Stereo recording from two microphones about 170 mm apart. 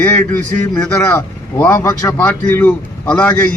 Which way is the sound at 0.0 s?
10° left (ahead or behind).